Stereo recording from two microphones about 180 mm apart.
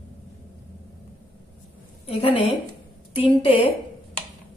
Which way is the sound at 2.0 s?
35° left (ahead or behind).